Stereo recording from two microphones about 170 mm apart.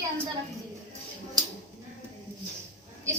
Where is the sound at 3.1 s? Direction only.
15° right (ahead or behind).